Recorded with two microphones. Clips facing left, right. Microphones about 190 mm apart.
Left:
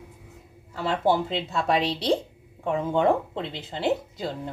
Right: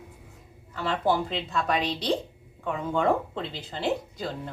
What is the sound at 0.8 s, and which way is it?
Speech, 25° left (ahead or behind).